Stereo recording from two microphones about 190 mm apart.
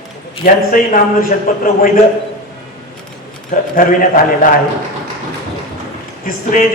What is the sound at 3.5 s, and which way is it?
Speech, 45° left (ahead or behind).